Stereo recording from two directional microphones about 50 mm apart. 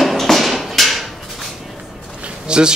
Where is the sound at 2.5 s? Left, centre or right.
Centre.